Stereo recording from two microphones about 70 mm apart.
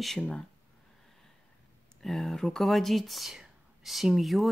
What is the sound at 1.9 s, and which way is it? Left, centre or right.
Speech, centre.